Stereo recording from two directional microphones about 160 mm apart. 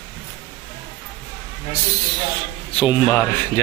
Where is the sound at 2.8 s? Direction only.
20° left (ahead or behind).